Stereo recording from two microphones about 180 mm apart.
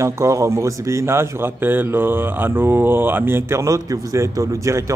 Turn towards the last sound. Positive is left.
turn(degrees=-15)  # may be behind; listen again after turning